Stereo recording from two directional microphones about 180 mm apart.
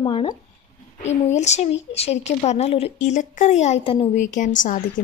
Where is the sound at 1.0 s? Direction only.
40° left (ahead or behind).